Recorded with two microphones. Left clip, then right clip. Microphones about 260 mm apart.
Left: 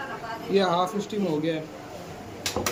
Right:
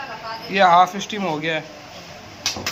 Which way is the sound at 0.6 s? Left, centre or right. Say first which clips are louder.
Right 11 dB; right.